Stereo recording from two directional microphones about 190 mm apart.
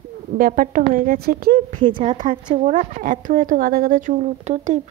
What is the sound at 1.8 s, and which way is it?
Speech, 25° right (ahead or behind).